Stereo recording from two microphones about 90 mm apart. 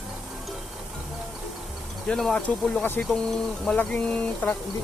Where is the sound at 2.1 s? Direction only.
10° left (ahead or behind).